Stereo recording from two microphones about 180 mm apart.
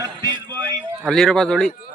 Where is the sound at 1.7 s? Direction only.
55° left (ahead or behind).